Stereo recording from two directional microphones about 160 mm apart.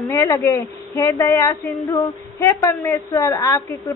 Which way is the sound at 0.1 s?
20° left (ahead or behind).